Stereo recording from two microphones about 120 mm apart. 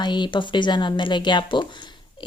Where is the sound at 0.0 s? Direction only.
40° left (ahead or behind).